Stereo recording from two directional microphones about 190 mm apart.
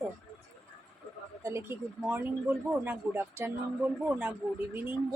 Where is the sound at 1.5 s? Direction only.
15° right (ahead or behind).